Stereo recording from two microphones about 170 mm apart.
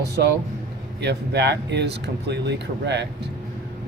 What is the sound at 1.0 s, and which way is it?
Speech, 80° right.